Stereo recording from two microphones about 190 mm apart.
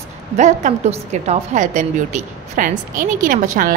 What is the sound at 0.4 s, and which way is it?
A woman's voice, 40° right (ahead or behind).